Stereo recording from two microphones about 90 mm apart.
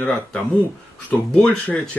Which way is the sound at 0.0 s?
10° left (ahead or behind).